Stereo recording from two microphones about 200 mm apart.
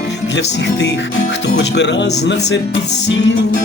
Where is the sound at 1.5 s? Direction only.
60° left (ahead or behind).